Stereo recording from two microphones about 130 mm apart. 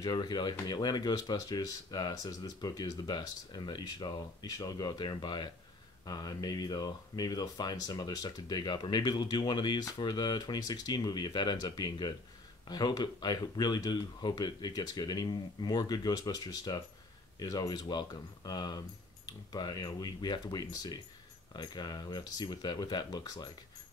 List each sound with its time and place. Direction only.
0.0 s speech: 30° left (ahead or behind)